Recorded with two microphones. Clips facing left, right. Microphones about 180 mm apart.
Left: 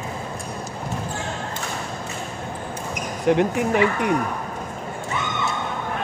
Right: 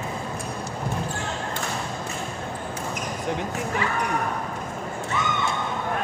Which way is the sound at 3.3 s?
65° left (ahead or behind).